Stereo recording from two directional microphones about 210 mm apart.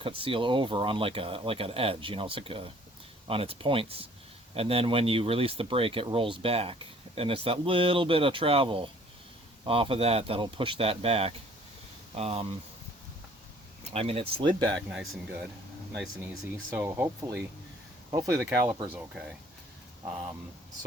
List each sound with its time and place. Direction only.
0.2 s speech: 25° right (ahead or behind)
13.9 s speech: 25° right (ahead or behind)
16.6 s speech: 10° right (ahead or behind)